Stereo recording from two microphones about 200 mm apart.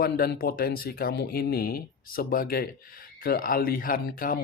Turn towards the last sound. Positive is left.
turn(degrees=45)  # may be behind; listen again after turning